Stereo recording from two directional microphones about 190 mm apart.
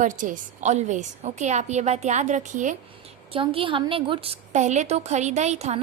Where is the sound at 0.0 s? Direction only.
40° right (ahead or behind).